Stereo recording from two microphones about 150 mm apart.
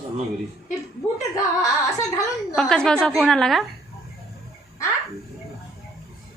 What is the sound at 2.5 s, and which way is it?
A woman's voice, 5° left (ahead or behind).